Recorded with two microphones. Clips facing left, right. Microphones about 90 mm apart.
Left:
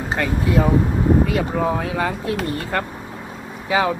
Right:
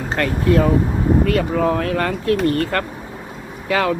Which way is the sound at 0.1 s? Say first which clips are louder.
Right 3 dB; 10° left (ahead or behind).